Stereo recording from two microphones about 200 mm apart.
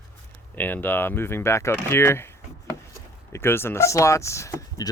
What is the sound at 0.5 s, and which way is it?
Speech, 10° left (ahead or behind).